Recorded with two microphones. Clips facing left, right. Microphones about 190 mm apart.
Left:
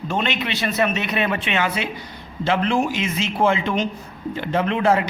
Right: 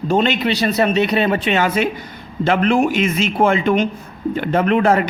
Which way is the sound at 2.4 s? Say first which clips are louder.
Right 5 dB; 55° right (ahead or behind).